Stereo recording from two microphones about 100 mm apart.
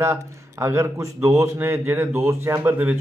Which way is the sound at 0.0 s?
25° right (ahead or behind).